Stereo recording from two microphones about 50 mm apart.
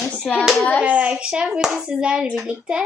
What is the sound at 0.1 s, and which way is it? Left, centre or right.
Hands, left.